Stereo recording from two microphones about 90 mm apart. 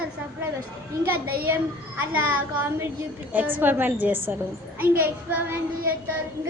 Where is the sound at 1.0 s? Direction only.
25° right (ahead or behind).